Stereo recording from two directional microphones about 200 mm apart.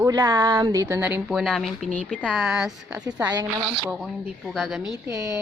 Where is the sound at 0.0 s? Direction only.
20° right (ahead or behind); by 4.8 s centre (ahead or behind).